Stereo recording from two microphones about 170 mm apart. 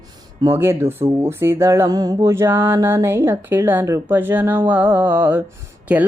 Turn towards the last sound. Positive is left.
turn(degrees=-10)  # may be behind; listen again after turning